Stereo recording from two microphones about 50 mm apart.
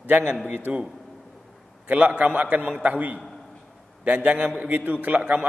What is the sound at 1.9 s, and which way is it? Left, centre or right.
A man's voice, right.